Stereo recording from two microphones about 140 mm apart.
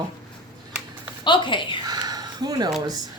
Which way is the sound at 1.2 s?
35° left (ahead or behind).